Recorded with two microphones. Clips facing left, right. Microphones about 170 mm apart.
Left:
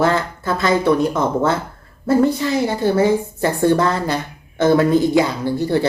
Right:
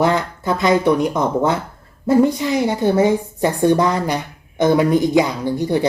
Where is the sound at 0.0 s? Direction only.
15° right (ahead or behind).